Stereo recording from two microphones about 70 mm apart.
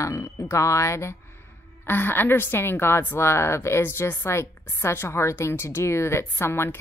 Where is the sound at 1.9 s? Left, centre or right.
Left.